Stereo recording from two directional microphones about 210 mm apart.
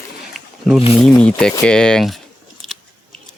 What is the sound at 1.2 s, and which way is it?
Speech, 5° left (ahead or behind).